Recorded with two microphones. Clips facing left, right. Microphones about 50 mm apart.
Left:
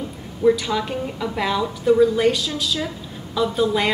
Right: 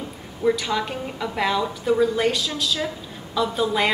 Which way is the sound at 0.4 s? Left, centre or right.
Centre.